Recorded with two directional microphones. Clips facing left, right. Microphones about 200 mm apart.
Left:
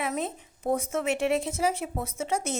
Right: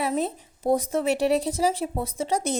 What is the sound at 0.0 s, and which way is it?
Speech, 35° right (ahead or behind).